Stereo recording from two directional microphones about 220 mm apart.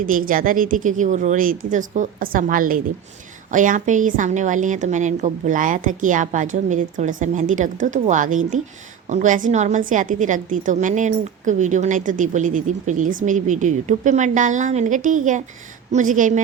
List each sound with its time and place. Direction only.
0.0 s a woman's voice: 40° right (ahead or behind)